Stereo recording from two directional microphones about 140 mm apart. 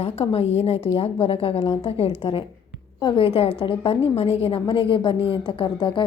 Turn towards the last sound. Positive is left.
turn(degrees=35)  # may be behind; listen again after turning